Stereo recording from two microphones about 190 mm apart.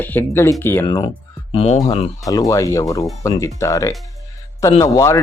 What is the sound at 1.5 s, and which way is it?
Speech, 35° left (ahead or behind).